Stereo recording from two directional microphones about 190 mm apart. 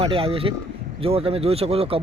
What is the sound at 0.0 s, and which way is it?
Speech, 30° right (ahead or behind).